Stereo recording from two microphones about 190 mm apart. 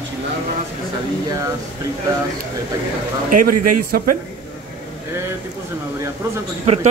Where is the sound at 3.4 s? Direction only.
45° right (ahead or behind).